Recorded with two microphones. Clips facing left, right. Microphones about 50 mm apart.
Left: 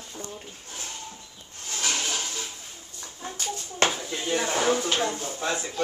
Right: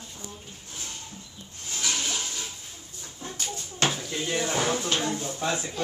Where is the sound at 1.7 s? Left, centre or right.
Left.